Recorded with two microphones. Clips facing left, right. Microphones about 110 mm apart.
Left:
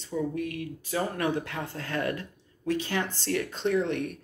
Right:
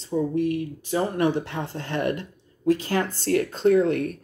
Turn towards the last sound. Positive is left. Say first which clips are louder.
# right 7 dB
turn(degrees=-40)  # may be behind; listen again after turning